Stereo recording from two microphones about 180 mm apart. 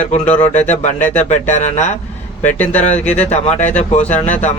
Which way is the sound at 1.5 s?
40° left (ahead or behind).